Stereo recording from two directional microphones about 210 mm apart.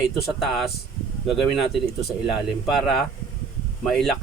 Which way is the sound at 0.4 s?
Centre (ahead or behind).